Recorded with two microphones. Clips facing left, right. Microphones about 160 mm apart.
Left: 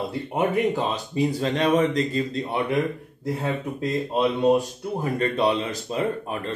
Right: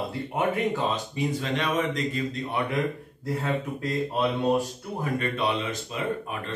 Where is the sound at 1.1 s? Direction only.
35° left (ahead or behind).